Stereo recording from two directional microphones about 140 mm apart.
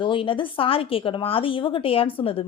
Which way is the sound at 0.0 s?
40° left (ahead or behind).